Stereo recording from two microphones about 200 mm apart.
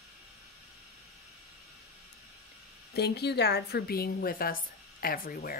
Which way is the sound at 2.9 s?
55° left (ahead or behind).